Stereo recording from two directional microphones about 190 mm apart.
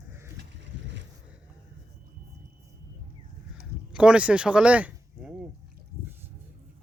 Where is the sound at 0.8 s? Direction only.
70° right (ahead or behind).